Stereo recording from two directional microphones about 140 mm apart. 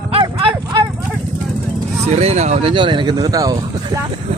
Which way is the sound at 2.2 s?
50° right (ahead or behind).